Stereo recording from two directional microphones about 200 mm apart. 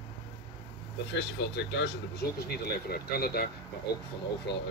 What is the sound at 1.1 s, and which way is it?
Speech, 60° left (ahead or behind).